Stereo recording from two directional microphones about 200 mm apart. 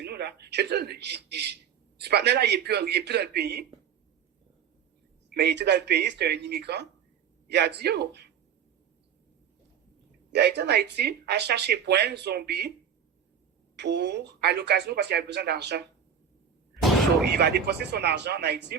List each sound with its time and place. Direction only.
0.0 s a man's voice: 55° right (ahead or behind)
5.3 s speech: 55° right (ahead or behind)
10.3 s speech: 55° right (ahead or behind)
13.7 s speech: 60° right (ahead or behind)
17.2 s speech: 55° right (ahead or behind)